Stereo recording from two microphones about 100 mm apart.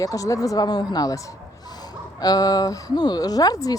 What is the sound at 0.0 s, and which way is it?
Speech, 35° left (ahead or behind).